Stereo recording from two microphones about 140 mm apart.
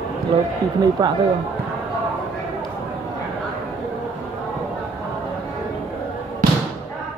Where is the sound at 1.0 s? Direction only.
30° right (ahead or behind).